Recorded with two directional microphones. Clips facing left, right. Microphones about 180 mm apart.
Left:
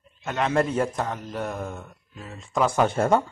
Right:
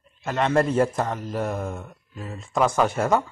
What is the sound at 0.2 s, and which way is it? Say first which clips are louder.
Speech: right 2 dB; centre (ahead or behind).